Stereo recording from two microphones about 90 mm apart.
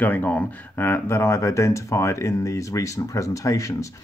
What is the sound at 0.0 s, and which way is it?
Speech, 20° left (ahead or behind).